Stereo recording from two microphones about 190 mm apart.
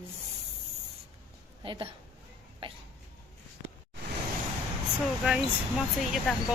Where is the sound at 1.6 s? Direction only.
25° right (ahead or behind).